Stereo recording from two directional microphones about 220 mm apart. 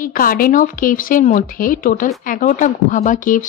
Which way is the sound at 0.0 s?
40° left (ahead or behind).